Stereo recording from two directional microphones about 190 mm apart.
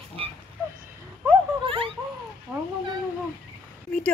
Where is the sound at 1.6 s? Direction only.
30° right (ahead or behind).